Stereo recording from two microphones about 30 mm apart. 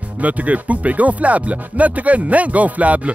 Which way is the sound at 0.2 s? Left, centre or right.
Right.